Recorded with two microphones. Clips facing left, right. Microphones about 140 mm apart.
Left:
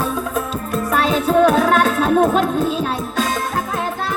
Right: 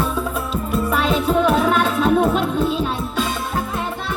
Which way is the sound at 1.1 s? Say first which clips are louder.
Left 4 dB; 40° left (ahead or behind).